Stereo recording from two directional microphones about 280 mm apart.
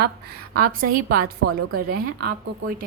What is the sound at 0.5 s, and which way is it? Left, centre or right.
A woman's voice, right.